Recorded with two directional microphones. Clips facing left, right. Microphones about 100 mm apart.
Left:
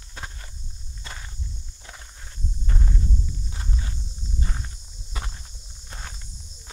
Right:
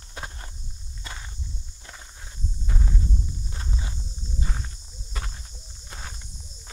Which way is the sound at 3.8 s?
20° right (ahead or behind).